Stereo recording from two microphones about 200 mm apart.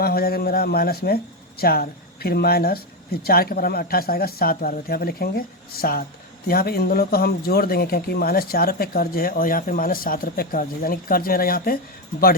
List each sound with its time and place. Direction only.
0.0 s speech: 50° left (ahead or behind)